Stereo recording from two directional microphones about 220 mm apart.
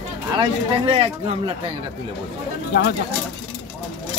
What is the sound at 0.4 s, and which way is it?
Speech, 25° right (ahead or behind).